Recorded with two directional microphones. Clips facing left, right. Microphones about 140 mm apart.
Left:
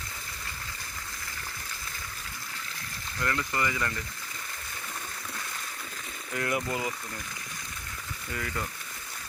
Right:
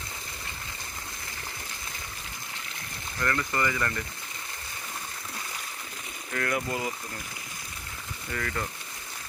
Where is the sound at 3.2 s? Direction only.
20° left (ahead or behind).